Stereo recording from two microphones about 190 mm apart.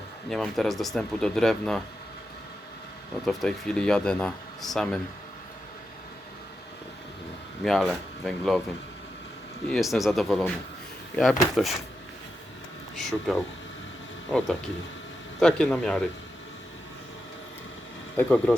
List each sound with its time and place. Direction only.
0.3 s speech: centre (ahead or behind)
3.2 s speech: centre (ahead or behind)
7.6 s speech: centre (ahead or behind)
9.7 s speech: centre (ahead or behind)
11.5 s speech: centre (ahead or behind)
13.0 s speech: centre (ahead or behind)
18.2 s speech: 5° left (ahead or behind)